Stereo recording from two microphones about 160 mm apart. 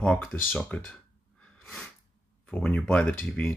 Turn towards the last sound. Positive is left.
turn(degrees=10)  # may be behind; listen again after turning